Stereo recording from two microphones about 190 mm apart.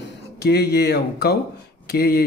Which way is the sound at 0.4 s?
60° left (ahead or behind).